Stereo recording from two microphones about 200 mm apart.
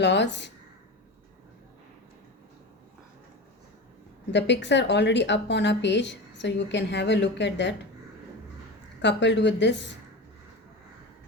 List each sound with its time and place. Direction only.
0.0 s a woman's voice: 60° left (ahead or behind)
4.3 s a woman's voice: 60° left (ahead or behind)
9.0 s a woman's voice: 60° left (ahead or behind)